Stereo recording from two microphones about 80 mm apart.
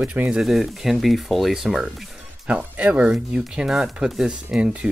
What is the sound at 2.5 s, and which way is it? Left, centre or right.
Speech, centre.